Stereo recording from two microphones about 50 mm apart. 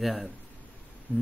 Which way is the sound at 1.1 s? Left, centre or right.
Left.